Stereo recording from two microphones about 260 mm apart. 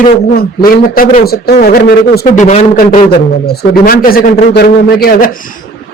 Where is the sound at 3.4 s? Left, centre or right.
Left.